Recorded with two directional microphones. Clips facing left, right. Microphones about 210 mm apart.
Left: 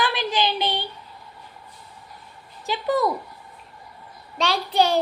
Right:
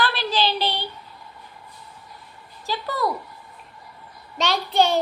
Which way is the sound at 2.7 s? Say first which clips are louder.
Left 4 dB; 20° left (ahead or behind).